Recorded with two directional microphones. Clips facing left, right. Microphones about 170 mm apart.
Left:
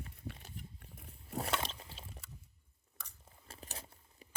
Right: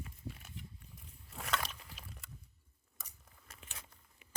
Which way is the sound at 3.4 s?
35° left (ahead or behind).